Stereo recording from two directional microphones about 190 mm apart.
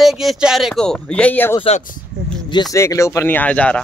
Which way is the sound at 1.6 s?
35° left (ahead or behind).